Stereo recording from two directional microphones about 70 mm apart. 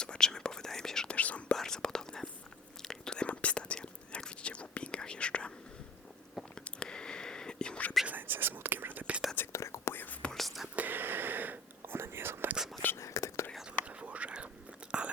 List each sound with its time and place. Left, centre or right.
0.0 s whispering: centre
1.1 s whispering: centre
1.5 s whispering: centre
6.7 s whispering: centre
8.0 s whispering: right
9.5 s whispering: left
9.9 s whispering: left
10.3 s whispering: centre
10.8 s whispering: right
12.5 s whispering: centre
13.0 s whispering: left
13.8 s whispering: centre